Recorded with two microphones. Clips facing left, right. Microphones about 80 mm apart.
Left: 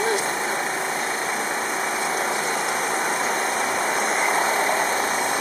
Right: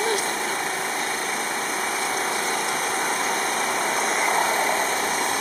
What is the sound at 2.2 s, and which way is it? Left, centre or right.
Vehicle, centre.